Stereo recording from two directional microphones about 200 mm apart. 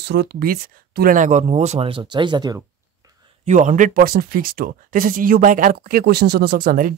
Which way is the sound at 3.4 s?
35° right (ahead or behind).